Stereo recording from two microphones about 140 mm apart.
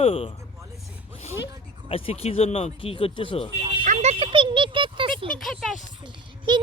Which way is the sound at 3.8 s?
55° right (ahead or behind).